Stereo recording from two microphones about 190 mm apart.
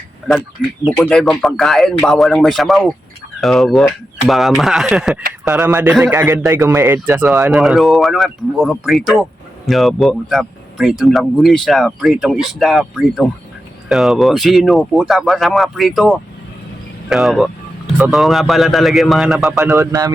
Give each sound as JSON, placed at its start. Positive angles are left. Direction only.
{"t": 0.9, "sound": "a man's voice", "side_deg": 5}
{"t": 19.7, "sound": "a man's voice", "side_deg": -20}